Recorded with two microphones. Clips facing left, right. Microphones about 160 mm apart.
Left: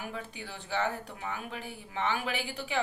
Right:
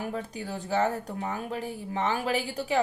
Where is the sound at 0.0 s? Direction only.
40° right (ahead or behind).